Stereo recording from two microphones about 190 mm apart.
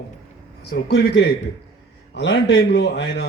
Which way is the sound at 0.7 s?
60° left (ahead or behind).